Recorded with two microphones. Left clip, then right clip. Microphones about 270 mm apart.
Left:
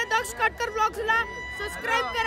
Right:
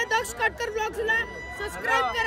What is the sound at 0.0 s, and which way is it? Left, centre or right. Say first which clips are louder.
A man's voice: even; centre.